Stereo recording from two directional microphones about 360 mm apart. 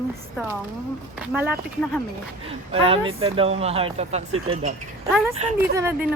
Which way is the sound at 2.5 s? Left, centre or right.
Centre.